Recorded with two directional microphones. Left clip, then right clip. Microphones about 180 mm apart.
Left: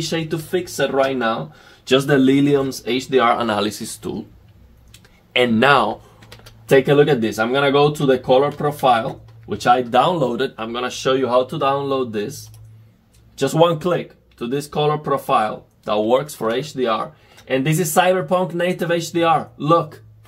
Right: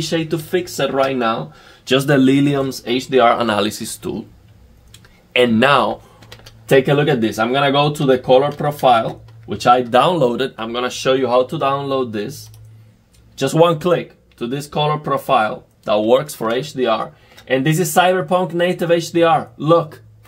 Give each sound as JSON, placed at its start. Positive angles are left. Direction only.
{"t": 0.3, "sound": "speech", "side_deg": -30}
{"t": 5.3, "sound": "speech", "side_deg": -20}
{"t": 6.3, "sound": "typing", "side_deg": -5}
{"t": 6.9, "sound": "speech", "side_deg": -30}
{"t": 13.4, "sound": "speech", "side_deg": -30}
{"t": 16.9, "sound": "speech", "side_deg": -5}
{"t": 19.1, "sound": "speech", "side_deg": -30}